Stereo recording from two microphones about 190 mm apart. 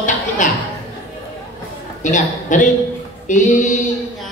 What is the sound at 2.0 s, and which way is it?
A woman's voice, 40° left (ahead or behind).